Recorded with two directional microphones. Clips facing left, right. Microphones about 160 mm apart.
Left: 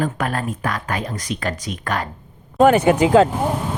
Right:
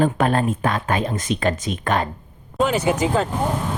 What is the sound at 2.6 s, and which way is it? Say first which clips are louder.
Speech: left 6 dB; 60° left (ahead or behind).